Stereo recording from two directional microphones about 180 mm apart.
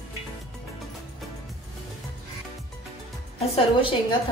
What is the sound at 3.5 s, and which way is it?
Speech, 30° left (ahead or behind).